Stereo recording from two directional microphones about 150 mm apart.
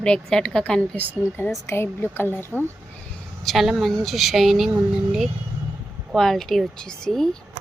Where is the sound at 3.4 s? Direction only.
Centre (ahead or behind).